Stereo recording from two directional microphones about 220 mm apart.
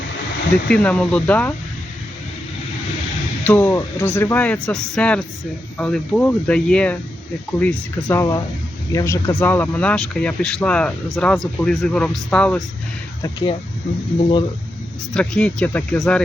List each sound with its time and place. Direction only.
0.7 s a man's voice: 5° left (ahead or behind)
3.4 s a man's voice: 5° left (ahead or behind)
13.2 s speech: 20° left (ahead or behind)
15.1 s speech: 5° left (ahead or behind)